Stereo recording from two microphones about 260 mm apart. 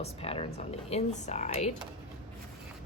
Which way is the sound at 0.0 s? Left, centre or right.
Left.